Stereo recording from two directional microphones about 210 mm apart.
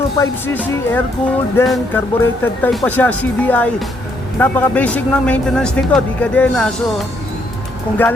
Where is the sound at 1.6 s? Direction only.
Centre (ahead or behind).